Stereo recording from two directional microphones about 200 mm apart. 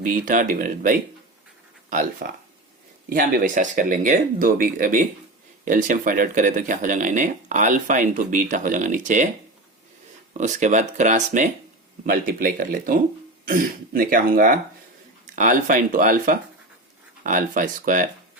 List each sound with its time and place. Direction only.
0.0 s speech: 40° right (ahead or behind)
10.3 s speech: 35° right (ahead or behind)